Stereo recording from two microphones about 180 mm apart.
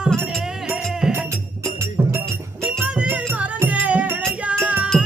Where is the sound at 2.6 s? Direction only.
10° right (ahead or behind).